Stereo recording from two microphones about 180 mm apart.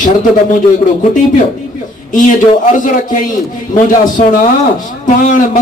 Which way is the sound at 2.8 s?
45° left (ahead or behind).